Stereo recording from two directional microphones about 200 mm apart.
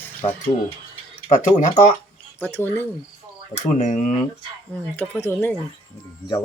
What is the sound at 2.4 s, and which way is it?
Speech, 10° left (ahead or behind).